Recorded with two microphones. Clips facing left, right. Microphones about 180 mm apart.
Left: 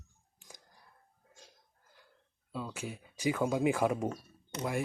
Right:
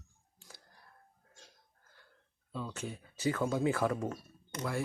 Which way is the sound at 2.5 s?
10° left (ahead or behind).